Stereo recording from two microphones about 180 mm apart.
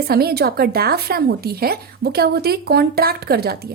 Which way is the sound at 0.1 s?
60° right (ahead or behind).